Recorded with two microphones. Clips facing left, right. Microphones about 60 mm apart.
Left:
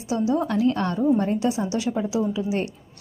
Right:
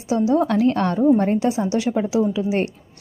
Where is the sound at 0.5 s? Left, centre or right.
Right.